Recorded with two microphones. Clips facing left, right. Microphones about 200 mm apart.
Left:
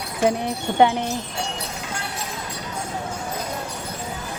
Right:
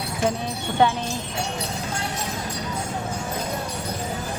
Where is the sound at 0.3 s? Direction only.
20° left (ahead or behind).